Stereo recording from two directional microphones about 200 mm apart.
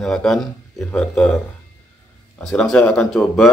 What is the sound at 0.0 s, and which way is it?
Speech, centre (ahead or behind).